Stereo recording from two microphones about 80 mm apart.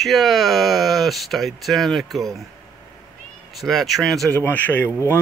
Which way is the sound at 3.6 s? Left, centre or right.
Centre.